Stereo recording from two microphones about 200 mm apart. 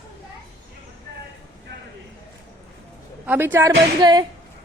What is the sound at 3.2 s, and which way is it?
A woman's voice, 10° right (ahead or behind).